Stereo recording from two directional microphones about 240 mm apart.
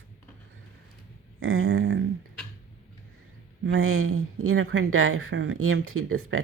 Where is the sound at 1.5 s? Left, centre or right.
Right.